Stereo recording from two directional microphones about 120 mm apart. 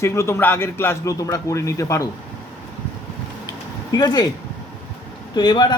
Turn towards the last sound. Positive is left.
turn(degrees=35)  # may be behind; listen again after turning